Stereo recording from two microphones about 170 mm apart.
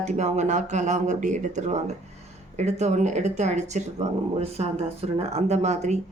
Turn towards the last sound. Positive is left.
turn(degrees=-40)  # may be behind; listen again after turning